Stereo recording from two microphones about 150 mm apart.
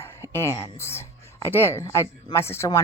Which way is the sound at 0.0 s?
15° left (ahead or behind).